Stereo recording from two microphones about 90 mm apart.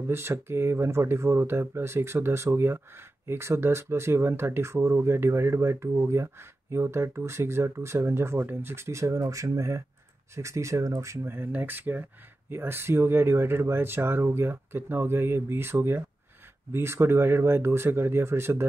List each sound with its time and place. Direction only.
0.1 s speech: 30° right (ahead or behind)